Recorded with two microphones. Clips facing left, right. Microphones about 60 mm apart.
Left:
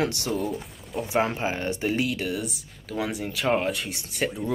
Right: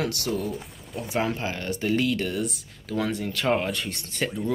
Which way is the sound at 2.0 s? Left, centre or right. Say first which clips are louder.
Right 2 dB; centre.